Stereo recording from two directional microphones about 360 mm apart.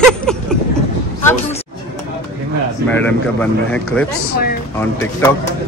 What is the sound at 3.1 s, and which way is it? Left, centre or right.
Speech, centre.